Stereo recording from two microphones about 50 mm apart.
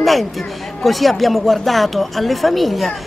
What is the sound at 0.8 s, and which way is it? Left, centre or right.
A woman's voice, centre.